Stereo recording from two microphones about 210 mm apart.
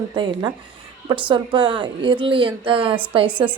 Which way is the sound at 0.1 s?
20° right (ahead or behind).